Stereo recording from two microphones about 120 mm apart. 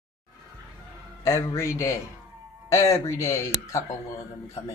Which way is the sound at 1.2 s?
25° left (ahead or behind).